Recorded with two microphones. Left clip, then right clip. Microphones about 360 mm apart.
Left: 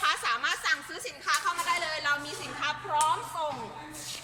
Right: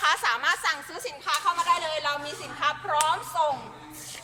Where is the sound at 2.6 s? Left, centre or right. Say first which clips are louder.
Right 3 dB; right.